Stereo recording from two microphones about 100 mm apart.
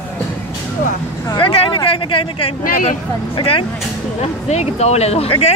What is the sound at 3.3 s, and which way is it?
Speech, 65° left (ahead or behind).